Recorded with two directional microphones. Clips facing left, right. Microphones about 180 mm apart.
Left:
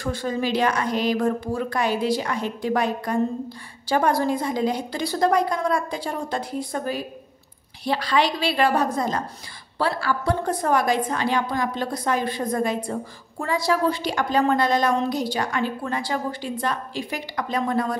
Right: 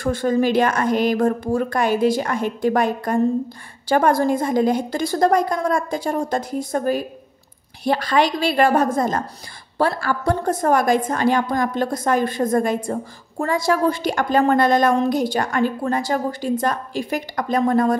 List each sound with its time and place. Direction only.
0.0 s a woman's voice: 50° right (ahead or behind)